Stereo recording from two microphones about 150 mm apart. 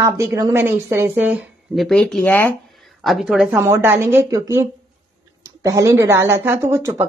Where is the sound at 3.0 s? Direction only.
5° right (ahead or behind).